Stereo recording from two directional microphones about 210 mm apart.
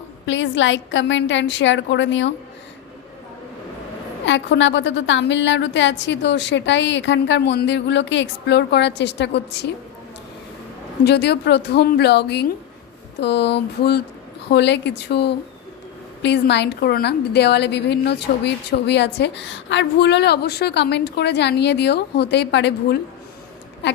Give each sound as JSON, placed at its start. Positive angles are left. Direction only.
{"t": 0.3, "sound": "a woman's voice", "side_deg": 60}
{"t": 4.3, "sound": "a woman's voice", "side_deg": 60}
{"t": 11.0, "sound": "a woman's voice", "side_deg": 55}